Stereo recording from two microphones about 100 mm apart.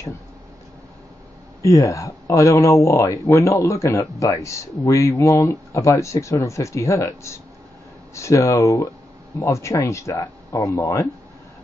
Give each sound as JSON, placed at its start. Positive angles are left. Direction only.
{"t": 1.6, "sound": "speech", "side_deg": 30}